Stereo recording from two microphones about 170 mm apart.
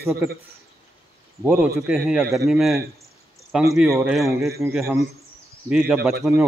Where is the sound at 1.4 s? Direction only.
Centre (ahead or behind).